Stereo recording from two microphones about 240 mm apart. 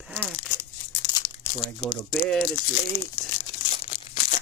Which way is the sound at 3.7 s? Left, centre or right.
Left.